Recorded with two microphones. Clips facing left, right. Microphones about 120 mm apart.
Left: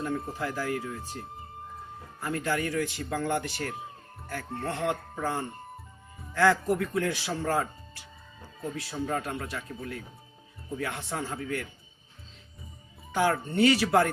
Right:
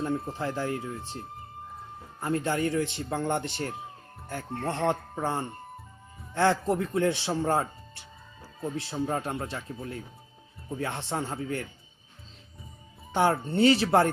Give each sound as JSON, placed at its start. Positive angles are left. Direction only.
{"t": 0.3, "sound": "a man's voice", "side_deg": -25}
{"t": 2.2, "sound": "a man's voice", "side_deg": -25}
{"t": 10.8, "sound": "a man's voice", "side_deg": -30}
{"t": 13.1, "sound": "a man's voice", "side_deg": -30}